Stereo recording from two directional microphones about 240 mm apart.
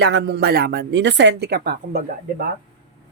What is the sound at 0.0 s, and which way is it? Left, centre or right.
A woman's voice, right.